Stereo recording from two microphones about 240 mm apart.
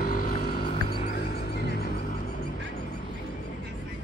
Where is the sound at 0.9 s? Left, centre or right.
Left.